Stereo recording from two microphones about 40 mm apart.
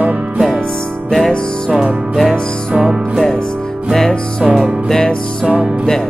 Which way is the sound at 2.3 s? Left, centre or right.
Centre.